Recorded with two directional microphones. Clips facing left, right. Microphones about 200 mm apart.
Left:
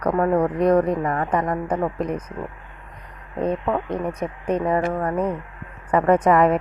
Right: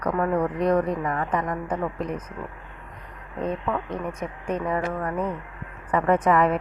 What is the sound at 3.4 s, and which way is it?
A woman's voice, 35° left (ahead or behind).